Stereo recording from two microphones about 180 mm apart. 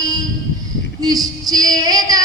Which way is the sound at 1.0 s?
20° right (ahead or behind).